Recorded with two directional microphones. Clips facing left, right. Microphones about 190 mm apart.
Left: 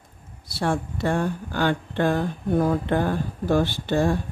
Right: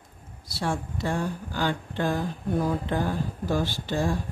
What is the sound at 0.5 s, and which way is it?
Speech, 60° left (ahead or behind).